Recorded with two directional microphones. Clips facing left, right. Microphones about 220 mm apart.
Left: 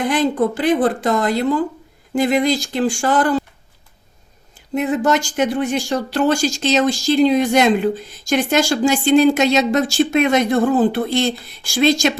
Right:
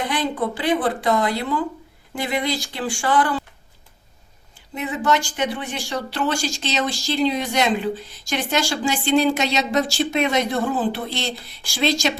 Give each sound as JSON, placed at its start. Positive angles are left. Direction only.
{"t": 0.1, "sound": "speech", "side_deg": 45}
{"t": 4.9, "sound": "speech", "side_deg": 45}